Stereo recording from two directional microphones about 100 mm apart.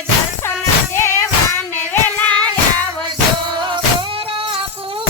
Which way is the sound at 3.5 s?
50° right (ahead or behind).